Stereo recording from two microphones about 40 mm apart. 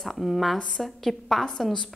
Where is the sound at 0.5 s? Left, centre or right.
Left.